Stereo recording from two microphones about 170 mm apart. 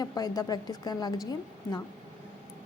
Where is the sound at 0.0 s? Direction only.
20° left (ahead or behind).